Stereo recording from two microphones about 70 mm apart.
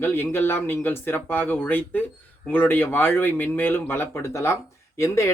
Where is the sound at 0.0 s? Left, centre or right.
Left.